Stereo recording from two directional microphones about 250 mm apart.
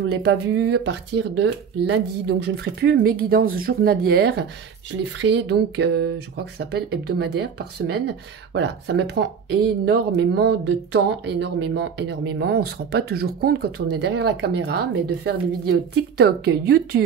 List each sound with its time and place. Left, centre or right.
0.1 s speech: right
15.9 s speech: right